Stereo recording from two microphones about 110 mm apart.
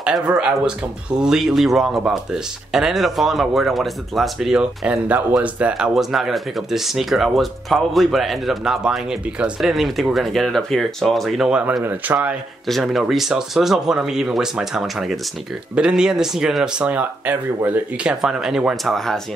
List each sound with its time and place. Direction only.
0.4 s speech: 10° right (ahead or behind)
12.6 s speech: centre (ahead or behind); by 18.1 s 15° right (ahead or behind)
18.2 s speech: 5° right (ahead or behind)